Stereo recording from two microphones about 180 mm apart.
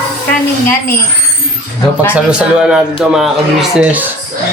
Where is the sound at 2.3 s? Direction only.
5° right (ahead or behind).